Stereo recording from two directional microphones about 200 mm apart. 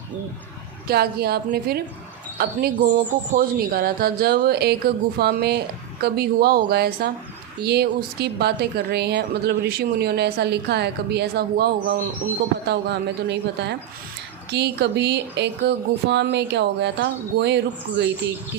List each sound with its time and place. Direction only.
0.9 s a woman's voice: 50° right (ahead or behind)